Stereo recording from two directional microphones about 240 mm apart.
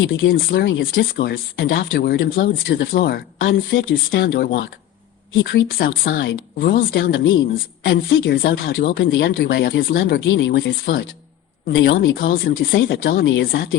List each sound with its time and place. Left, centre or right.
0.0 s speech: left